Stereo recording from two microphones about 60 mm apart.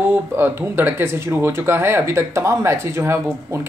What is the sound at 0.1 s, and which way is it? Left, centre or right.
Speech, right.